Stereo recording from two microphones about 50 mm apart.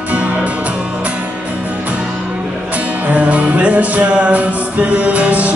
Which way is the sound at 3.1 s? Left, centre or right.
Right.